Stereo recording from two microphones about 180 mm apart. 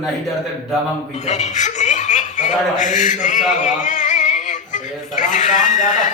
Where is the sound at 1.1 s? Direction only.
40° left (ahead or behind).